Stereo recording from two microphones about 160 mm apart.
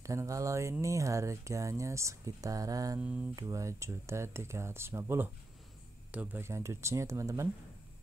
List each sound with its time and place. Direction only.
0.0 s speech: 20° right (ahead or behind)
3.0 s speech: 10° right (ahead or behind)
3.3 s speech: 20° right (ahead or behind)